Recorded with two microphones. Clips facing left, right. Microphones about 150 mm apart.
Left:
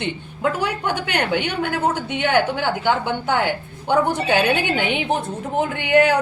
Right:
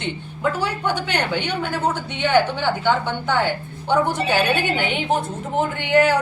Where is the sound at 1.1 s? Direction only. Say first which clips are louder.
Left 2 dB; 10° left (ahead or behind).